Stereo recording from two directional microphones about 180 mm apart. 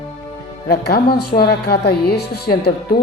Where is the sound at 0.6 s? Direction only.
60° left (ahead or behind).